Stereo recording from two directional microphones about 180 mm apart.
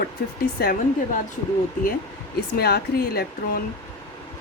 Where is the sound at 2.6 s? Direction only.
60° left (ahead or behind).